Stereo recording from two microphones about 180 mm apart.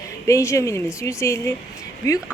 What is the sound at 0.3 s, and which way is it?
A woman's voice, 15° left (ahead or behind).